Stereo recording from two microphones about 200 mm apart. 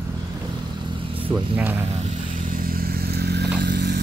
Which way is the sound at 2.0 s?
40° right (ahead or behind).